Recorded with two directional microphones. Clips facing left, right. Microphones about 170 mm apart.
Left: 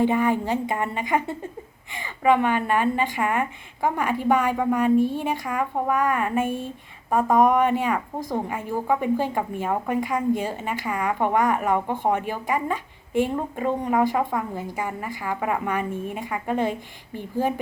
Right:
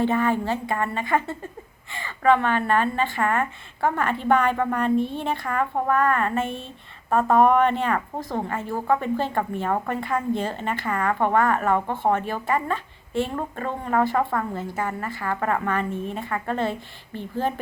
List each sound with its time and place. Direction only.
0.0 s a woman's voice: 15° left (ahead or behind)